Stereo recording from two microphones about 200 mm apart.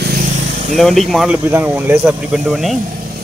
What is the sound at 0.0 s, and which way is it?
Vehicle, 45° right (ahead or behind).